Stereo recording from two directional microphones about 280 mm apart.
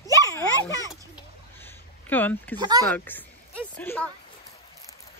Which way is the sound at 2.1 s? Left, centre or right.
Centre.